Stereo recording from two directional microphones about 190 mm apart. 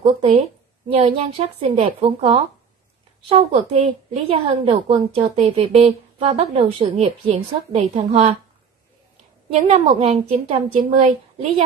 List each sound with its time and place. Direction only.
0.0 s a woman's voice: 30° right (ahead or behind)
9.5 s a woman's voice: 35° right (ahead or behind)